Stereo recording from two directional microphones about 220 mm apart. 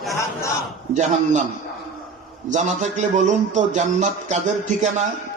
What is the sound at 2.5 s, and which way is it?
Speech, 35° right (ahead or behind).